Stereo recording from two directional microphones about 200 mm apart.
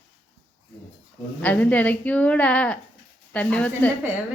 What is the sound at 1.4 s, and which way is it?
A woman's voice, 10° left (ahead or behind).